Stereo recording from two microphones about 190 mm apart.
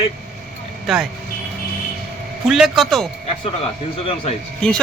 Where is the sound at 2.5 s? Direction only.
Centre (ahead or behind).